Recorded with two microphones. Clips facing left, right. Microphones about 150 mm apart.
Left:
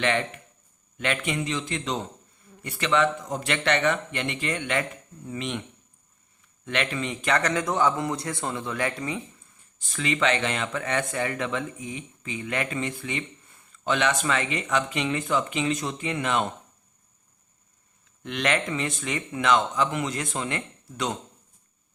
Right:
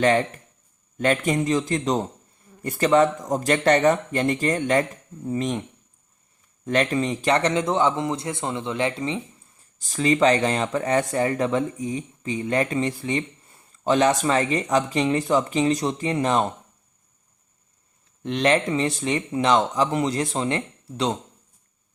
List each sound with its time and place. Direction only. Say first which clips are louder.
0.0 s speech: right 6 dB; 40° right (ahead or behind)
6.7 s a man's voice: right 7 dB; 40° right (ahead or behind)
9.8 s speech: right 6 dB; 40° right (ahead or behind)
18.2 s speech: right 6 dB; 35° right (ahead or behind)